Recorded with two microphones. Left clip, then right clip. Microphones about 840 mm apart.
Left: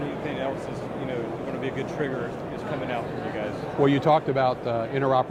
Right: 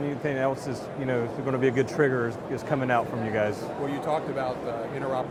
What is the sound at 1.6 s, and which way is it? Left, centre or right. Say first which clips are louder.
Speech: right 8 dB; right.